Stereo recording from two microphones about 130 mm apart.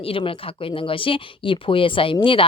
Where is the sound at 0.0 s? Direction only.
45° left (ahead or behind).